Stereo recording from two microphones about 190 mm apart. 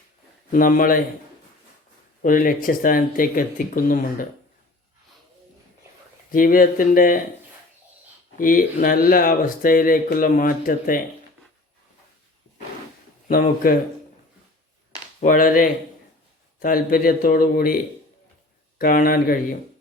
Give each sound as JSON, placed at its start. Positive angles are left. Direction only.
{"t": 0.5, "sound": "speech", "side_deg": 45}
{"t": 2.2, "sound": "speech", "side_deg": 45}
{"t": 6.3, "sound": "speech", "side_deg": 45}
{"t": 8.4, "sound": "speech", "side_deg": 45}
{"t": 13.2, "sound": "speech", "side_deg": 50}
{"t": 15.2, "sound": "speech", "side_deg": 45}
{"t": 18.8, "sound": "speech", "side_deg": 50}